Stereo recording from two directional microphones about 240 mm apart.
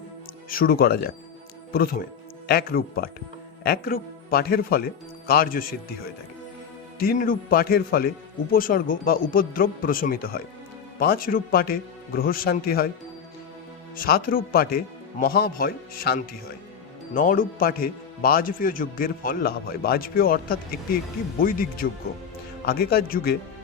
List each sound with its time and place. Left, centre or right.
0.5 s a man's voice: left
7.0 s a man's voice: left
13.9 s a man's voice: left